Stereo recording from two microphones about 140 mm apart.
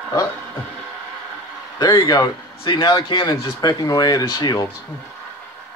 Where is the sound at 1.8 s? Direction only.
30° left (ahead or behind).